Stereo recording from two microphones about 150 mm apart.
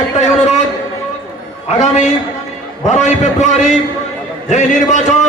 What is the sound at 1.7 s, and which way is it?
A man's voice, 50° left (ahead or behind).